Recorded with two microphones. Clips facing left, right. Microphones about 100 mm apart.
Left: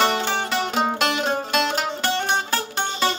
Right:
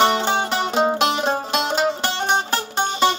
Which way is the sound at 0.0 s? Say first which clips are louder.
Right 3 dB; 20° right (ahead or behind).